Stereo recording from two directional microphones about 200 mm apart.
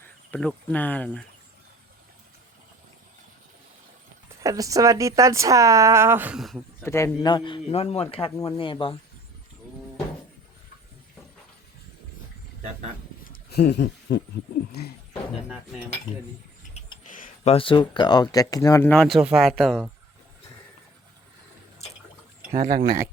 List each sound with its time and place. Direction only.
0.0 s speech: 5° left (ahead or behind)
4.4 s speech: 15° right (ahead or behind)
6.8 s a man's voice: 15° left (ahead or behind)
13.3 s a sound: 55° left (ahead or behind)
17.1 s speech: 35° left (ahead or behind); by 19.9 s centre (ahead or behind)
22.5 s speech: 45° right (ahead or behind)